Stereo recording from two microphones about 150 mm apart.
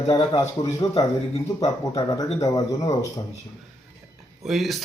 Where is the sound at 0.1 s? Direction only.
25° left (ahead or behind).